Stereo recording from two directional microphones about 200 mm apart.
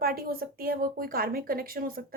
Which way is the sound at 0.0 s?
50° right (ahead or behind).